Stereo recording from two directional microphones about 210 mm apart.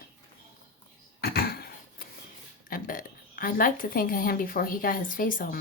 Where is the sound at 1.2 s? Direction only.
45° left (ahead or behind).